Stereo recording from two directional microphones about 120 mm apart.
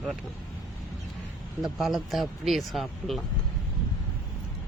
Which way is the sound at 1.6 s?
Centre (ahead or behind).